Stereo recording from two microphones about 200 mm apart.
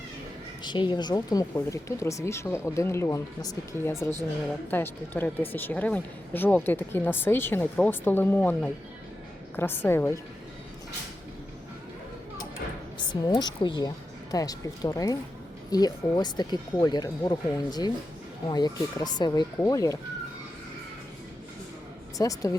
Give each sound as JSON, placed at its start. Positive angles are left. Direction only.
{"t": 0.6, "sound": "speech", "side_deg": 25}
{"t": 13.0, "sound": "a woman's voice", "side_deg": 20}
{"t": 22.2, "sound": "speech", "side_deg": 15}